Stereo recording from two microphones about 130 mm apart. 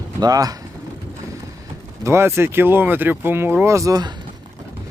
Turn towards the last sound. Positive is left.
turn(degrees=-30)  # may be behind; listen again after turning